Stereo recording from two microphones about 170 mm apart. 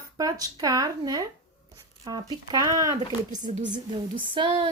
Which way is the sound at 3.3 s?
45° right (ahead or behind).